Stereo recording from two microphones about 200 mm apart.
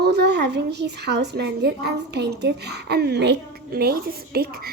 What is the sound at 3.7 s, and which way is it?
Speech, 50° right (ahead or behind).